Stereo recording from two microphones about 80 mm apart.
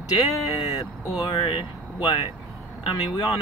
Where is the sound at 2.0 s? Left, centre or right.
Left.